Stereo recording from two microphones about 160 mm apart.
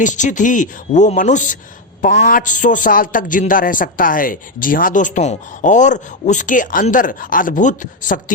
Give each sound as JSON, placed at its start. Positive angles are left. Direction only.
{"t": 0.0, "sound": "a man's voice", "side_deg": 50}